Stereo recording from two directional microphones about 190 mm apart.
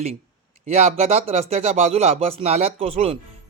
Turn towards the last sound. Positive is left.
turn(degrees=-30)  # may be behind; listen again after turning